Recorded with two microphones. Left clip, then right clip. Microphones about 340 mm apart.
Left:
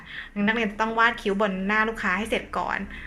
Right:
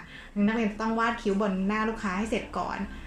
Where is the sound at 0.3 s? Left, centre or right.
Left.